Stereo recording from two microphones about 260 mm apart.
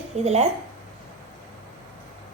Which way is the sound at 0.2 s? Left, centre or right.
Right.